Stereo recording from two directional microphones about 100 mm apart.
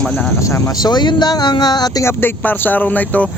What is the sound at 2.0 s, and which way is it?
Speech, 25° left (ahead or behind).